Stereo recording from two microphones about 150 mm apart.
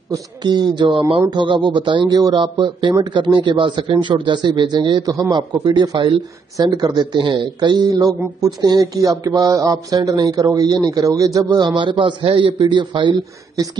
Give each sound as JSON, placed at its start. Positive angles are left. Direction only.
{"t": 0.1, "sound": "speech", "side_deg": -30}